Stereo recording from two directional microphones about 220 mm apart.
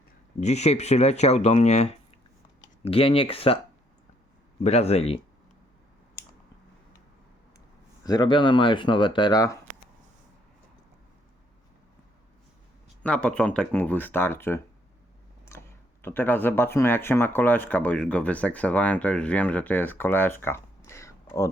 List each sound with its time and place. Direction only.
0.3 s speech: 30° left (ahead or behind)
4.6 s speech: 30° left (ahead or behind)
8.0 s speech: 20° left (ahead or behind)
13.0 s speech: 5° left (ahead or behind)